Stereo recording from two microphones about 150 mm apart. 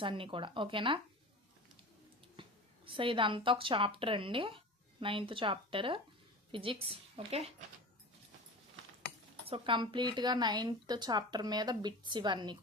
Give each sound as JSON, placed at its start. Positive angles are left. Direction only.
{"t": 0.0, "sound": "a woman's voice", "side_deg": -35}
{"t": 2.3, "sound": "a woman's voice", "side_deg": -35}
{"t": 9.5, "sound": "a woman's voice", "side_deg": -35}